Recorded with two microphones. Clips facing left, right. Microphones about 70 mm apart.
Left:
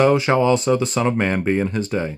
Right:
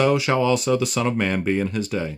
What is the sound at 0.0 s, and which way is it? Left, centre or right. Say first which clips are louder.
Speech: left 3 dB; left.